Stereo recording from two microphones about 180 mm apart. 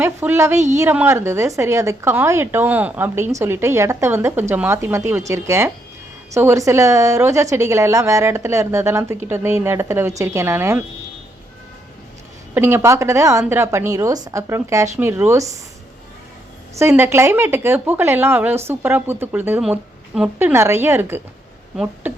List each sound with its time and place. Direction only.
0.0 s a woman's voice: 15° right (ahead or behind)
12.5 s a woman's voice: 15° right (ahead or behind)
16.7 s a woman's voice: 15° right (ahead or behind)